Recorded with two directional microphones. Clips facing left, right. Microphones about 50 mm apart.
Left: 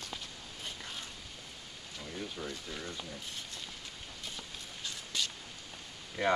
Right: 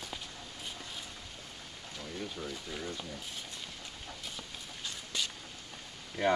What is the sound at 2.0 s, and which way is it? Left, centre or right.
Speech, centre.